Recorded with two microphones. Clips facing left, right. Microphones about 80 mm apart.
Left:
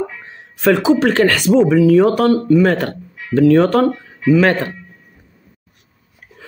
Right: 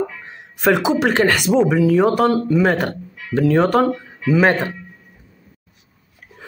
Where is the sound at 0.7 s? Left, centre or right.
Centre.